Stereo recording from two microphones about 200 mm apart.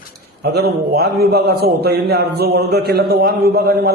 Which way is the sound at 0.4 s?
55° right (ahead or behind).